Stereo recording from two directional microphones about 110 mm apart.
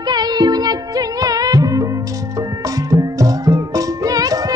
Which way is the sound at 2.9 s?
35° right (ahead or behind).